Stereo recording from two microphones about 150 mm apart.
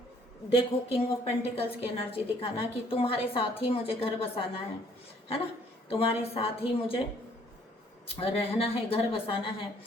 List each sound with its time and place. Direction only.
0.5 s a woman's voice: 40° left (ahead or behind)
5.9 s a woman's voice: 40° left (ahead or behind)
8.0 s a woman's voice: 40° left (ahead or behind)